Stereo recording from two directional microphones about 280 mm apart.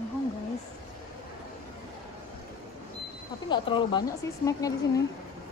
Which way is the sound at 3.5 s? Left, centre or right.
Centre.